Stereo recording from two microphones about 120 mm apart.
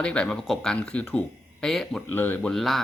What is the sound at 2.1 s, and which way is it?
Speech, 15° left (ahead or behind).